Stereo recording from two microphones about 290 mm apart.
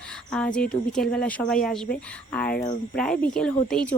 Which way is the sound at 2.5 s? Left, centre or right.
Left.